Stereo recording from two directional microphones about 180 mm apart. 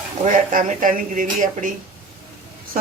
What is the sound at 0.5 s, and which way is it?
Speech, 50° right (ahead or behind).